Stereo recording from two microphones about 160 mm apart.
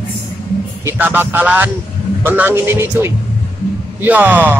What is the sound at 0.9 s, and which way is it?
Speech, 10° right (ahead or behind).